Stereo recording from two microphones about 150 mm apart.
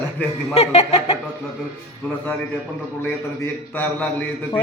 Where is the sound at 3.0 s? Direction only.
15° left (ahead or behind).